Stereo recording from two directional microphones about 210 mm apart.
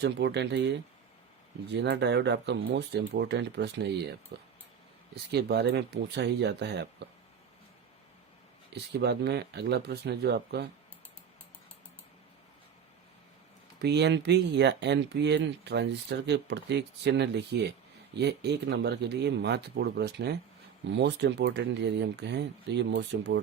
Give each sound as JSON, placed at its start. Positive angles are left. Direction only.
{"t": 0.0, "sound": "speech", "side_deg": -55}
{"t": 8.7, "sound": "speech", "side_deg": -55}
{"t": 13.8, "sound": "speech", "side_deg": -55}